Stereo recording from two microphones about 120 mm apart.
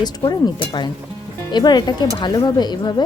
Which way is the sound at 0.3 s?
40° left (ahead or behind).